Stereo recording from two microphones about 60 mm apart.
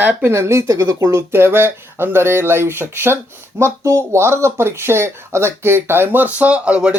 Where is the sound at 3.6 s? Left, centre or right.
Right.